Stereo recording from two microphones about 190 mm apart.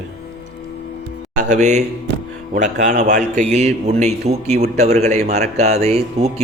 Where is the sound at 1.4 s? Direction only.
40° right (ahead or behind).